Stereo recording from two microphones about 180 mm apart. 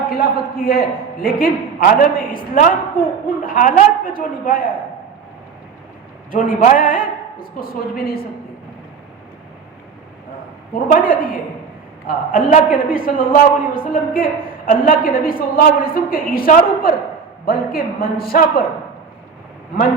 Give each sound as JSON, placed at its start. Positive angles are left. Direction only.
{"t": 0.1, "sound": "a man's voice", "side_deg": 55}
{"t": 6.3, "sound": "a man's voice", "side_deg": 50}
{"t": 10.8, "sound": "a man's voice", "side_deg": 50}